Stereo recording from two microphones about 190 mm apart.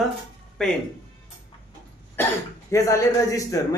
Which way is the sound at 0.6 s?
5° left (ahead or behind).